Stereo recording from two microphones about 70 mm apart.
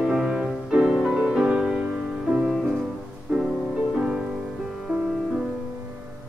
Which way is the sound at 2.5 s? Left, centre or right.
Centre.